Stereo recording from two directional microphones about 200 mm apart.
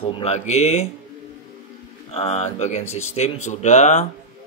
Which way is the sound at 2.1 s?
30° left (ahead or behind).